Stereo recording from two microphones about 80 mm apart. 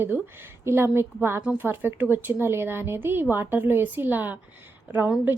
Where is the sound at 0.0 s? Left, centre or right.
Right.